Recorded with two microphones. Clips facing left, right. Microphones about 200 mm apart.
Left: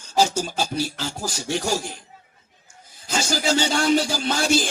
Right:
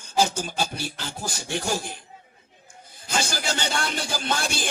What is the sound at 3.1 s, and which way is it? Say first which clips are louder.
Speech: left 5 dB; 55° right (ahead or behind).